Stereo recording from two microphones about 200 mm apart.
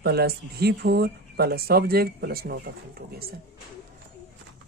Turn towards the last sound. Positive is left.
turn(degrees=-50)  # may be behind; listen again after turning